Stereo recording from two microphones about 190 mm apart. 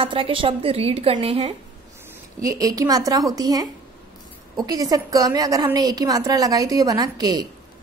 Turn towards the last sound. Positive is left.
turn(degrees=-20)  # may be behind; listen again after turning